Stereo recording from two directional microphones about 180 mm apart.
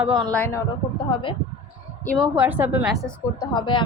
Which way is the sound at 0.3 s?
10° left (ahead or behind).